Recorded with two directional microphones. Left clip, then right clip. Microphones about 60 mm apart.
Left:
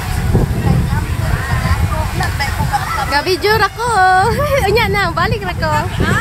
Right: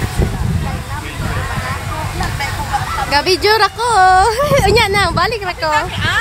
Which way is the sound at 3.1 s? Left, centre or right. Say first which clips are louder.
Right 2 dB; centre.